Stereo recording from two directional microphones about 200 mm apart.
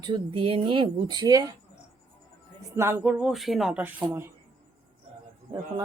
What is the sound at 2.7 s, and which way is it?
Speech, 10° right (ahead or behind).